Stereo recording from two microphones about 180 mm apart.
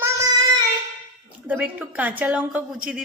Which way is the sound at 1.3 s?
10° right (ahead or behind).